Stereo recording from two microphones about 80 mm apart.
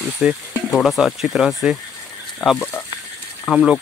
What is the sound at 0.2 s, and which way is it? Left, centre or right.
Speech, centre.